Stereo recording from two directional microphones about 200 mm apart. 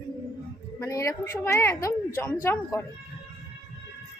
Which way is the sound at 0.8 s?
15° left (ahead or behind).